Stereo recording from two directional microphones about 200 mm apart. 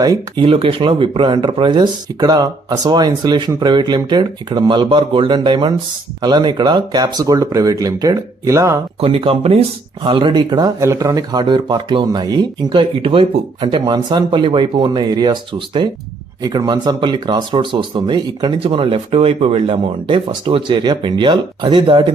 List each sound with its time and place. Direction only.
0.0 s speech: 20° right (ahead or behind)
9.0 s speech: 30° right (ahead or behind)